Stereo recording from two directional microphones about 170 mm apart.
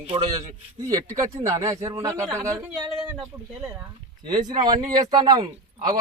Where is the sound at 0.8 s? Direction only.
20° right (ahead or behind).